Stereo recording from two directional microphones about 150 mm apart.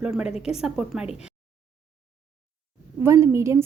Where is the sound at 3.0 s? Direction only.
15° right (ahead or behind).